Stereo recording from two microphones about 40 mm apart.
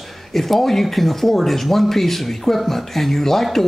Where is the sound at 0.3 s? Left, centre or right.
Centre.